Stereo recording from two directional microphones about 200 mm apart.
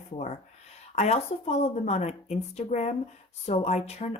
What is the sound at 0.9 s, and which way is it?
A woman's voice, 35° left (ahead or behind).